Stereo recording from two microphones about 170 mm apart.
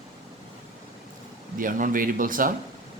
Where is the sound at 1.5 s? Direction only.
55° right (ahead or behind).